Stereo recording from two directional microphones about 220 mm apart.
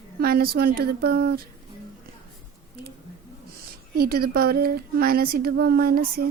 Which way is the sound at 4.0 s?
45° right (ahead or behind).